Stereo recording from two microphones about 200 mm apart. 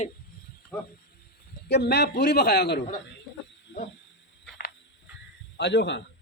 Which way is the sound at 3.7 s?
65° left (ahead or behind).